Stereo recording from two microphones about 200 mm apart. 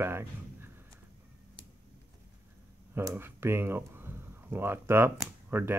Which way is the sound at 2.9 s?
15° right (ahead or behind).